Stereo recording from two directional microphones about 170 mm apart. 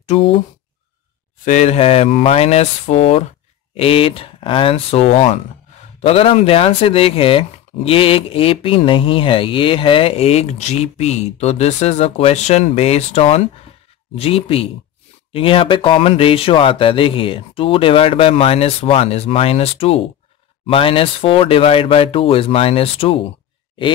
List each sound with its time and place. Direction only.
0.0 s speech: 40° left (ahead or behind)
1.4 s speech: 45° left (ahead or behind)